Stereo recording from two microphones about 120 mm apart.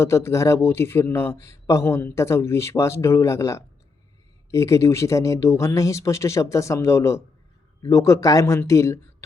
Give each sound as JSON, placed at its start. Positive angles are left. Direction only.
{"t": 0.0, "sound": "a man's voice", "side_deg": 25}